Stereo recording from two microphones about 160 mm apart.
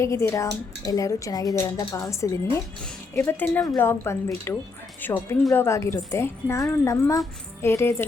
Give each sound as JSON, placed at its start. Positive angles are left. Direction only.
{"t": 0.0, "sound": "a woman's voice", "side_deg": 15}